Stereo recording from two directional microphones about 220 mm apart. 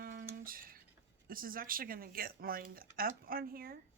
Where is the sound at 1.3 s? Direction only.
40° right (ahead or behind).